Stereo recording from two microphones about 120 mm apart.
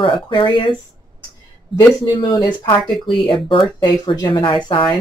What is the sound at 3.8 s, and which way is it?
Speech, 35° left (ahead or behind).